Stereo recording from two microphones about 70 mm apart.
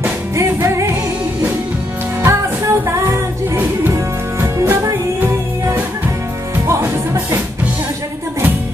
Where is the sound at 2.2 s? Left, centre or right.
Right.